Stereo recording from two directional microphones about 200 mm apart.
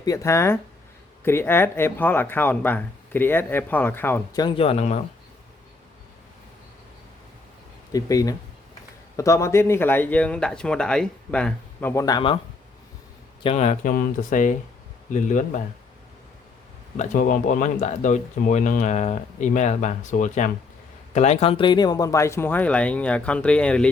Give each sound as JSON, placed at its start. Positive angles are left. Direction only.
{"t": 0.0, "sound": "speech", "side_deg": 15}
{"t": 4.4, "sound": "speech", "side_deg": 25}
{"t": 7.9, "sound": "speech", "side_deg": 15}
{"t": 13.4, "sound": "speech", "side_deg": 35}
{"t": 17.0, "sound": "speech", "side_deg": 40}